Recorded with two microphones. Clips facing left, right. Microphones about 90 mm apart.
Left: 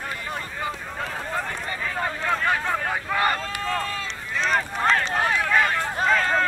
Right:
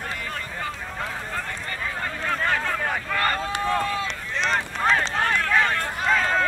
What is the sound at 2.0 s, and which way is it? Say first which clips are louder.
Boat: left 2 dB; 15° left (ahead or behind).